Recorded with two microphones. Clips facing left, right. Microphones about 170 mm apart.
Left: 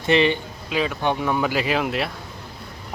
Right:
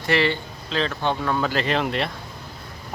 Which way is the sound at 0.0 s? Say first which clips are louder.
Left 3 dB; 20° left (ahead or behind).